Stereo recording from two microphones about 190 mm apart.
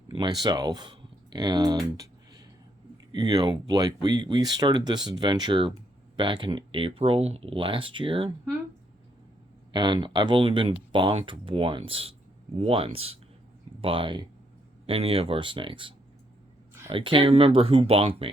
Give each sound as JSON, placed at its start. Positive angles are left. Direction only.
{"t": 0.1, "sound": "speech", "side_deg": -20}
{"t": 3.1, "sound": "speech", "side_deg": -25}
{"t": 9.7, "sound": "speech", "side_deg": -25}